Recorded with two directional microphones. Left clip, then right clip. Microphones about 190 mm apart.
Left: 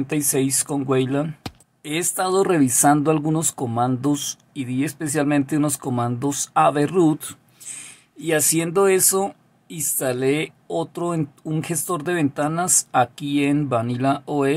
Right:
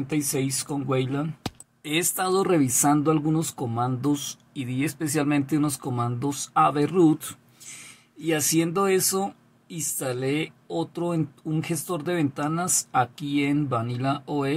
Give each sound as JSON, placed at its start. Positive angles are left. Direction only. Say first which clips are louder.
{"t": 0.0, "sound": "speech", "louder": "left 5 dB", "side_deg": 30}
{"t": 1.8, "sound": "speech", "louder": "left 2 dB", "side_deg": 15}